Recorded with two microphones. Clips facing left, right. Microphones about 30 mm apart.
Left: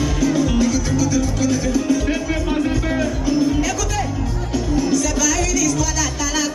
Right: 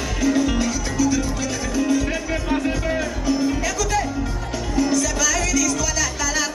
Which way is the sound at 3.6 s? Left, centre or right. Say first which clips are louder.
Right 1 dB; centre.